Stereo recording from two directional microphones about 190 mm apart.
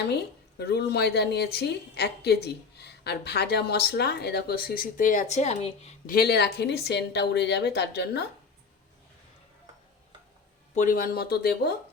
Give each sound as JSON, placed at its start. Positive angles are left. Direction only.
{"t": 0.6, "sound": "a woman's voice", "side_deg": 60}
{"t": 6.1, "sound": "a woman's voice", "side_deg": 55}
{"t": 10.8, "sound": "speech", "side_deg": 45}